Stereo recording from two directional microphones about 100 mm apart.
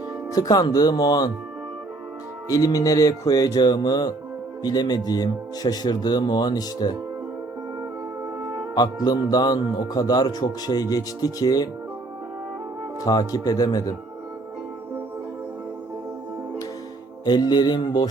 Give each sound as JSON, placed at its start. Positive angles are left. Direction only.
{"t": 0.3, "sound": "music", "side_deg": 35}
{"t": 2.5, "sound": "music", "side_deg": 40}
{"t": 4.6, "sound": "speech", "side_deg": 45}
{"t": 8.7, "sound": "speech", "side_deg": 45}
{"t": 13.1, "sound": "music", "side_deg": 40}
{"t": 17.2, "sound": "speech", "side_deg": 45}